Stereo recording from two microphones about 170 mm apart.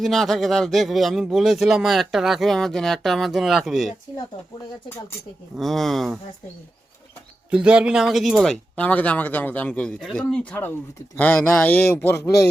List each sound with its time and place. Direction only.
0.0 s speech: centre (ahead or behind)
5.5 s speech: centre (ahead or behind)
7.5 s speech: 5° right (ahead or behind); by 12.5 s 20° left (ahead or behind)